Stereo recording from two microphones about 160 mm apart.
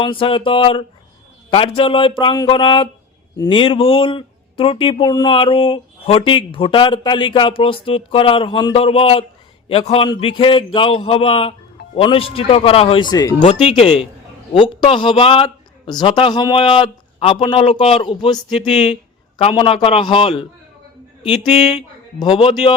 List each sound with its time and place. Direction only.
0.0 s speech: 30° left (ahead or behind)
13.4 s speech: 40° left (ahead or behind)
19.4 s speech: 35° left (ahead or behind)